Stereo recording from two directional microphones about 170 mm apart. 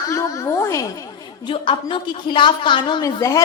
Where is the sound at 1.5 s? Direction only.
30° left (ahead or behind).